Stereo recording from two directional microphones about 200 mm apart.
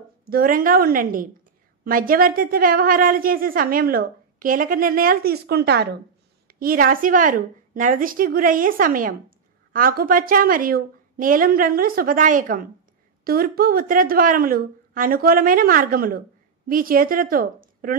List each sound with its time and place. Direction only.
0.2 s a woman's voice: 45° right (ahead or behind)